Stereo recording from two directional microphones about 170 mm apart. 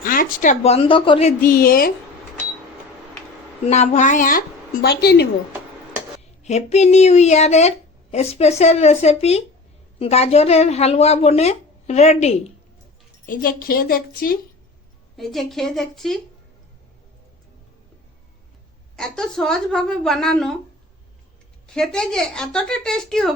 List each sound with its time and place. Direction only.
0.0 s a sound: 55° left (ahead or behind)
0.6 s a woman's voice: 35° left (ahead or behind)
1.4 s a woman's voice: 60° left (ahead or behind)
3.7 s a woman's voice: 45° left (ahead or behind); by 5.3 s 75° left (ahead or behind)
6.4 s a woman's voice: 40° left (ahead or behind)
13.2 s a woman's voice: 55° left (ahead or behind)
15.1 s a woman's voice: centre (ahead or behind)
18.9 s a woman's voice: 5° left (ahead or behind)
21.8 s a woman's voice: 5° left (ahead or behind)